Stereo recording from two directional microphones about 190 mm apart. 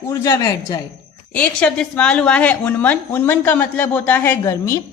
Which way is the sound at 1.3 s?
5° left (ahead or behind).